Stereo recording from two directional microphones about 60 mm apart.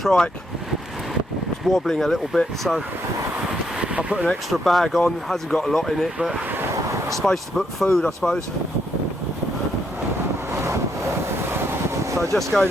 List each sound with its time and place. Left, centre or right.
0.0 s speech: centre
1.6 s speech: centre
3.8 s speech: right
4.4 s speech: centre
6.8 s artillery fire: right
7.3 s speech: centre
10.5 s vehicle: right
12.3 s speech: centre